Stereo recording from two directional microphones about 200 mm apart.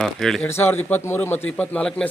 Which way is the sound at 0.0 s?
Centre (ahead or behind).